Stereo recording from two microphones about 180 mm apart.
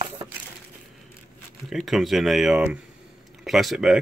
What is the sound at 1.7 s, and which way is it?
Speech, centre (ahead or behind).